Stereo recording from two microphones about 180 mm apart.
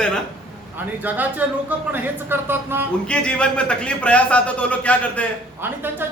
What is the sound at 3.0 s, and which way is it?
A man's voice, 5° left (ahead or behind).